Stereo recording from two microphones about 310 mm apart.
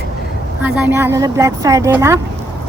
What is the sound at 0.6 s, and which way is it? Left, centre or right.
Speech, centre.